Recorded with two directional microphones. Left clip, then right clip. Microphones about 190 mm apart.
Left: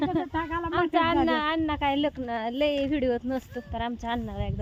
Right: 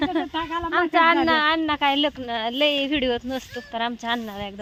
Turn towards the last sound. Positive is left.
turn(degrees=-15)  # may be behind; listen again after turning